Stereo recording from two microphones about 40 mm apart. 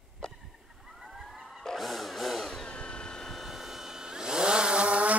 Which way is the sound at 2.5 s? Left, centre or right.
Left.